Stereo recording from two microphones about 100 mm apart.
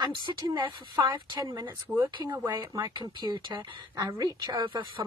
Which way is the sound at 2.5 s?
45° right (ahead or behind).